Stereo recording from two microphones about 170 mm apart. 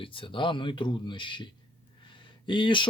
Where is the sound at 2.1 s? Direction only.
30° left (ahead or behind).